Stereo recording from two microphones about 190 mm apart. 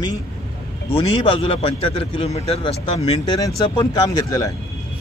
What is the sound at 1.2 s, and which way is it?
Speech, 25° left (ahead or behind).